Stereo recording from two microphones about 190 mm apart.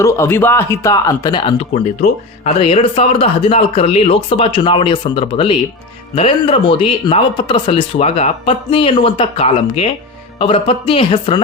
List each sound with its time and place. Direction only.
0.0 s speech: 15° left (ahead or behind)